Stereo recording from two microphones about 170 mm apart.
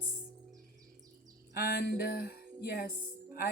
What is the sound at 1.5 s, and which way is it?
Music, 70° left (ahead or behind).